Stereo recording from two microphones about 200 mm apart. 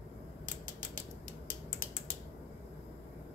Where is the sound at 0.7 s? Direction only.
45° left (ahead or behind).